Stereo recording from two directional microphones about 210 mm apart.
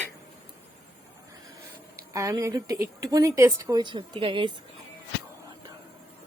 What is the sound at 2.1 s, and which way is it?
Speech, 15° right (ahead or behind).